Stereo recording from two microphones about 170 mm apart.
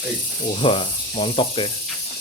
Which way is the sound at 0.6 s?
35° left (ahead or behind).